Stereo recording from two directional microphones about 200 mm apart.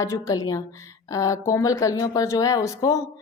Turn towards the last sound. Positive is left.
turn(degrees=15)  # may be behind; listen again after turning